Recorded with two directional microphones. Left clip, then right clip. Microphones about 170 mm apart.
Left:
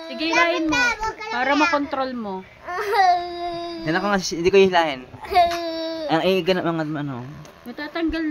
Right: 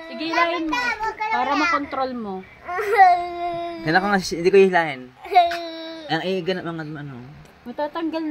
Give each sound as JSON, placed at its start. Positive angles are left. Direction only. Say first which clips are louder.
{"t": 0.2, "sound": "a child's voice", "louder": "left 2 dB", "side_deg": 35}
{"t": 1.3, "sound": "a child's voice", "louder": "left 2 dB", "side_deg": 25}
{"t": 2.7, "sound": "baby cry", "louder": "right 3 dB", "side_deg": 10}
{"t": 4.0, "sound": "speech", "louder": "even", "side_deg": 5}
{"t": 5.3, "sound": "a sound", "louder": "right 1 dB", "side_deg": 25}
{"t": 6.2, "sound": "a child's voice", "louder": "left 5 dB", "side_deg": 20}
{"t": 7.8, "sound": "speech", "louder": "even", "side_deg": 10}